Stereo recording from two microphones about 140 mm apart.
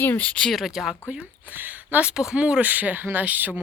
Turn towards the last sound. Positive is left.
turn(degrees=-10)  # may be behind; listen again after turning